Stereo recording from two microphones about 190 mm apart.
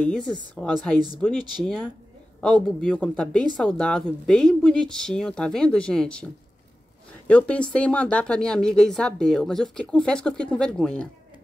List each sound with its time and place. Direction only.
0.0 s a woman's voice: 5° left (ahead or behind)
0.9 s speech: 20° right (ahead or behind)
2.6 s a woman's voice: 5° left (ahead or behind)
7.2 s a woman's voice: 5° left (ahead or behind)